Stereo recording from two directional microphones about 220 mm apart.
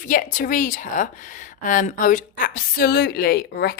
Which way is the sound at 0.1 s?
40° left (ahead or behind).